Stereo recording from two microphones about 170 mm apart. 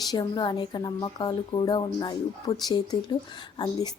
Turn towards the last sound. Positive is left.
turn(degrees=25)  # may be behind; listen again after turning